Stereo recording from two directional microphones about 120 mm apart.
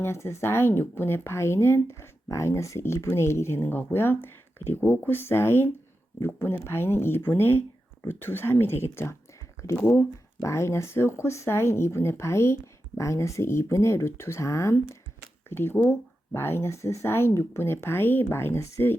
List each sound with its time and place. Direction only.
0.0 s speech: 20° left (ahead or behind)